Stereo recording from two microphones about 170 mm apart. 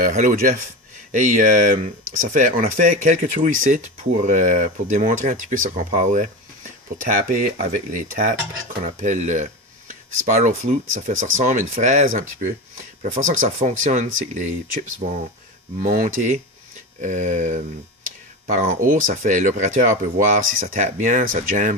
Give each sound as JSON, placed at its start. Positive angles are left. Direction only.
{"t": 0.0, "sound": "speech", "side_deg": -55}
{"t": 15.8, "sound": "speech", "side_deg": -50}
{"t": 18.9, "sound": "speech", "side_deg": -50}